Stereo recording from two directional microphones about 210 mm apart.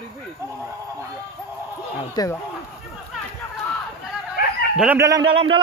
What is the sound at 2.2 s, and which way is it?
Speech, 20° left (ahead or behind).